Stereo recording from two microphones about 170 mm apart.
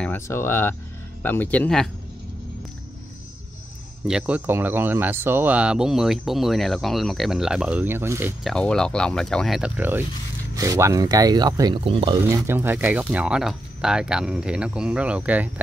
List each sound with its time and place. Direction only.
0.0 s speech: 15° left (ahead or behind)
4.1 s speech: 10° right (ahead or behind)
8.5 s speech: 5° left (ahead or behind); by 11.8 s 20° right (ahead or behind)
11.8 s speech: 30° right (ahead or behind)
12.2 s speech: 15° right (ahead or behind)